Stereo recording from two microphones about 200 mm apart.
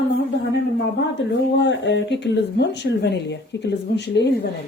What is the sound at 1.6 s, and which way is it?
Speech, 60° left (ahead or behind).